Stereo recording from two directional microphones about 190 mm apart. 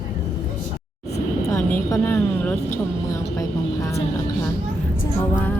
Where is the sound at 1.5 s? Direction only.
15° left (ahead or behind).